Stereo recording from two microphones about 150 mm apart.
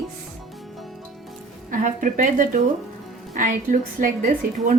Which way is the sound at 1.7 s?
60° right (ahead or behind).